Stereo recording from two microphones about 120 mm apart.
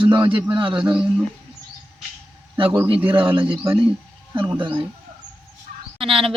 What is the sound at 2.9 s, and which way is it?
A man's voice, 45° right (ahead or behind).